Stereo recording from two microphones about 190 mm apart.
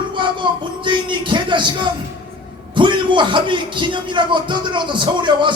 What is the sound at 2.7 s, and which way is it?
Speech, 25° right (ahead or behind).